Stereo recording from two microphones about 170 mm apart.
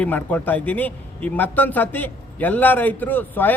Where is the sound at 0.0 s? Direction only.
10° left (ahead or behind).